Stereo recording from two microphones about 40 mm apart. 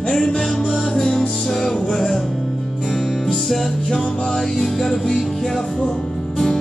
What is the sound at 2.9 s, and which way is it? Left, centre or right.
Music, centre.